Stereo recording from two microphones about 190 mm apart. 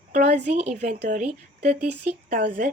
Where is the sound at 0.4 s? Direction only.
35° right (ahead or behind).